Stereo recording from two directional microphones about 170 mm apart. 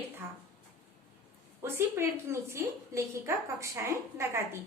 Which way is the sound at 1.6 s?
15° right (ahead or behind).